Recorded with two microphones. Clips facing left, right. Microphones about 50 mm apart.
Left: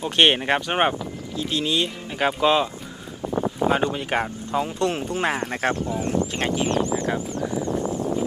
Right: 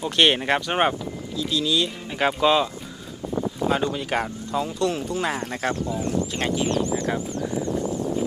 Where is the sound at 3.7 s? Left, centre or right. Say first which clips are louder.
Even; left.